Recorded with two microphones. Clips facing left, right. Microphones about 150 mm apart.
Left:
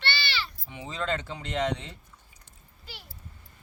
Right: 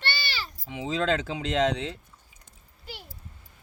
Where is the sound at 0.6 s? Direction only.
90° right.